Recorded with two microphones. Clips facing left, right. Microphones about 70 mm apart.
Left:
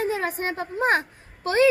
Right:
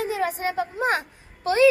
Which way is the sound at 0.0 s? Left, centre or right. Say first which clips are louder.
Even; left.